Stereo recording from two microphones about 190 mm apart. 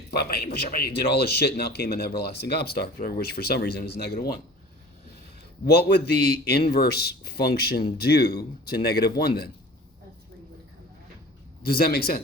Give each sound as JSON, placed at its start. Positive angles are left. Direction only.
{"t": 0.1, "sound": "speech", "side_deg": 55}
{"t": 5.6, "sound": "speech", "side_deg": 55}
{"t": 11.6, "sound": "speech", "side_deg": 50}